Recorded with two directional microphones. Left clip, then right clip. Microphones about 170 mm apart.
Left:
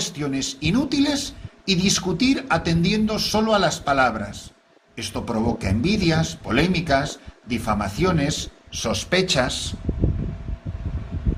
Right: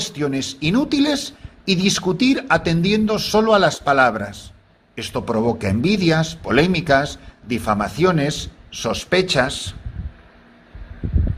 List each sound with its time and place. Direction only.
0.0 s speech: 50° right (ahead or behind)